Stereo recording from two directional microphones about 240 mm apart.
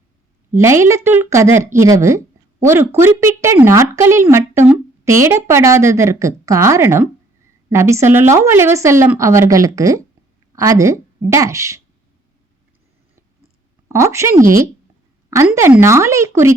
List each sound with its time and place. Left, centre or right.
0.5 s a woman's voice: centre
13.8 s a woman's voice: centre